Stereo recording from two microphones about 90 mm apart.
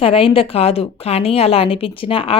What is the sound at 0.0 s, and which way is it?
A woman's voice, 90° left.